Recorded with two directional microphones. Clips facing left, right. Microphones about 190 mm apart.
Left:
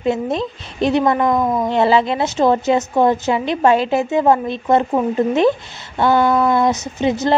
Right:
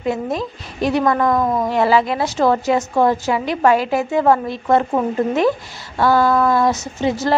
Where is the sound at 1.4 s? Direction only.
Centre (ahead or behind).